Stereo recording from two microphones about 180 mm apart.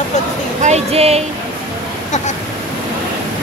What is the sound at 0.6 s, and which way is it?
Speech, 35° right (ahead or behind).